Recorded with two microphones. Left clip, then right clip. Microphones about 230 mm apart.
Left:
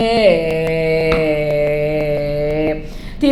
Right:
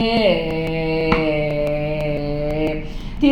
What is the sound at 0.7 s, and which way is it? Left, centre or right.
Music, left.